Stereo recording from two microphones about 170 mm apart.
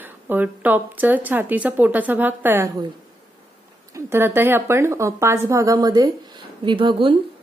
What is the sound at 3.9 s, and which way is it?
A woman's voice, 15° right (ahead or behind).